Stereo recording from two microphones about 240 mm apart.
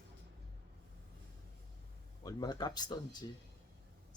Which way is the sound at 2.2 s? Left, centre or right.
Centre.